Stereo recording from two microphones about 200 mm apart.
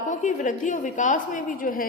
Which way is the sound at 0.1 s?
40° left (ahead or behind).